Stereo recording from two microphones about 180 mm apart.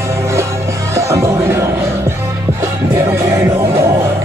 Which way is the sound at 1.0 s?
15° right (ahead or behind).